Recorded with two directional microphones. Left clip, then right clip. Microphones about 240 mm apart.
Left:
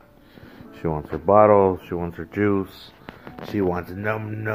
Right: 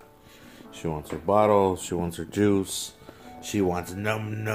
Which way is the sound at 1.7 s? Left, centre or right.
Centre.